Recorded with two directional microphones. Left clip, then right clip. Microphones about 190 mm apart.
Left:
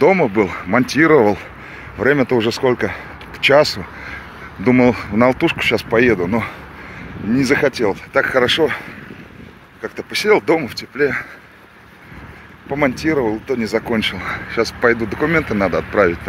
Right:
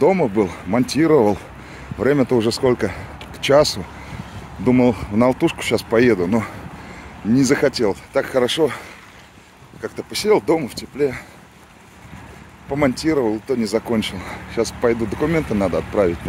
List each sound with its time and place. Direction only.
0.0 s speech: 5° right (ahead or behind)
4.6 s speech: 5° right (ahead or behind)
12.6 s speech: 20° right (ahead or behind)